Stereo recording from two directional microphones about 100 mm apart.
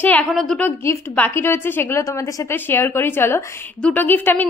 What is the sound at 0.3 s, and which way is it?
Speech, centre (ahead or behind).